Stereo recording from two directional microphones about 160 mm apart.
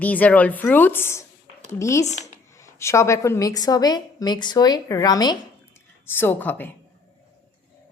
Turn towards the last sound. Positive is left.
turn(degrees=10)  # may be behind; listen again after turning